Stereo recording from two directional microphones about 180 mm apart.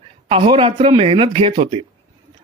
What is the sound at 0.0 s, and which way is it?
Speech, 30° right (ahead or behind).